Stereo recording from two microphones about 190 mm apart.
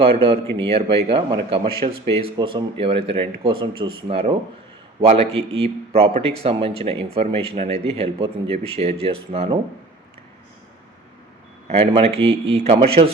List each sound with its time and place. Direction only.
0.0 s a man's voice: 30° right (ahead or behind)
11.7 s a man's voice: 30° right (ahead or behind)